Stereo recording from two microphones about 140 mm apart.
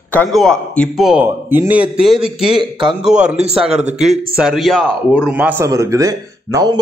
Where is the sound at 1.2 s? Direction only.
15° right (ahead or behind).